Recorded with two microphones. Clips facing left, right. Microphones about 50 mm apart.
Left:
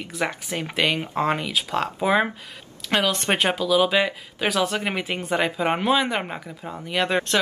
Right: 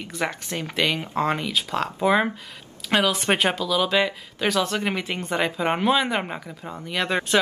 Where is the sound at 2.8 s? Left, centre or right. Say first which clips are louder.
Right 1 dB; centre.